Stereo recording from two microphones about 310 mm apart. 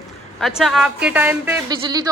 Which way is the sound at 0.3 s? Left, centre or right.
Centre.